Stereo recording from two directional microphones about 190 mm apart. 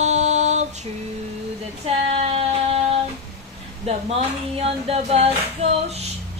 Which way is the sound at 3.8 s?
35° right (ahead or behind).